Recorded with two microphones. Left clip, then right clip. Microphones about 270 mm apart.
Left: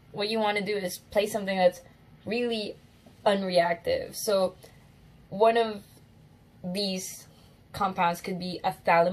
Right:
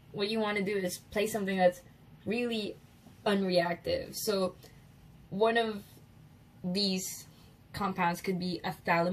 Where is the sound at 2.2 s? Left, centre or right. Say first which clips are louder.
Left 4 dB; left.